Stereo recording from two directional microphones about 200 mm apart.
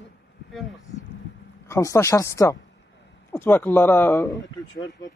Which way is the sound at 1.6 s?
15° left (ahead or behind).